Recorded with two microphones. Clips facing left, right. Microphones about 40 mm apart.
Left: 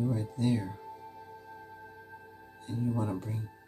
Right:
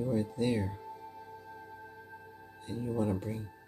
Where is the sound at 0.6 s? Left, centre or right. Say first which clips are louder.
Right 2 dB; centre.